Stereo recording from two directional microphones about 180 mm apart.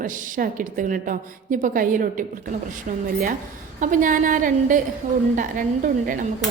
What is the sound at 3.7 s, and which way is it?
A woman's voice, 45° right (ahead or behind).